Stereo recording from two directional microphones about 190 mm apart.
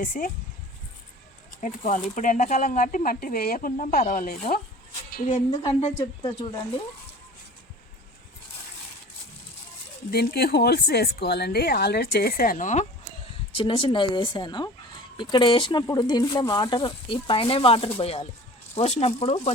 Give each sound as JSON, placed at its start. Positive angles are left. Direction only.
{"t": 0.0, "sound": "speech", "side_deg": 45}
{"t": 1.6, "sound": "speech", "side_deg": 40}
{"t": 5.6, "sound": "speech", "side_deg": 35}
{"t": 10.1, "sound": "a woman's voice", "side_deg": 55}
{"t": 13.5, "sound": "speech", "side_deg": 25}